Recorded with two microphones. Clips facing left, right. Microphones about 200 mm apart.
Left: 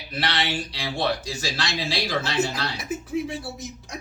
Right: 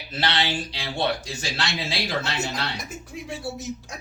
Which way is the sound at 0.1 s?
25° right (ahead or behind).